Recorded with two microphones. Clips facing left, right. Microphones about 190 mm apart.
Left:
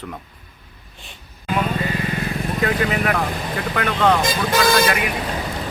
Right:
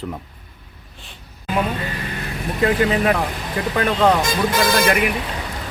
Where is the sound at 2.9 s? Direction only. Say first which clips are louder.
Right 3 dB; 25° right (ahead or behind).